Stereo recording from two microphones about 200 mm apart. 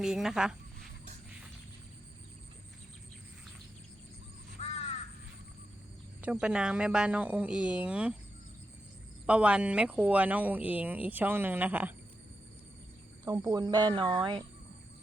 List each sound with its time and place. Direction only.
0.0 s speech: centre (ahead or behind)
4.6 s crow: 35° left (ahead or behind)
6.2 s a woman's voice: 5° right (ahead or behind)
9.2 s speech: 5° right (ahead or behind)
13.2 s speech: 15° right (ahead or behind)